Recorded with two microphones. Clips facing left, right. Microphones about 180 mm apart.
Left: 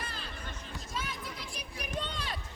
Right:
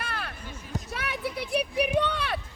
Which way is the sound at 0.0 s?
70° right (ahead or behind).